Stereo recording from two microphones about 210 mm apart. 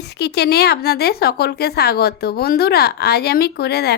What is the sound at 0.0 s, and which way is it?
A woman's voice, 50° left (ahead or behind).